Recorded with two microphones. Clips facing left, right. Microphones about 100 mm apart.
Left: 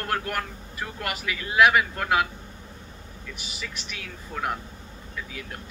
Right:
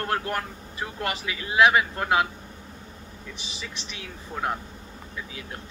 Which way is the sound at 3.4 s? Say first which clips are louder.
Left 1 dB; 30° right (ahead or behind).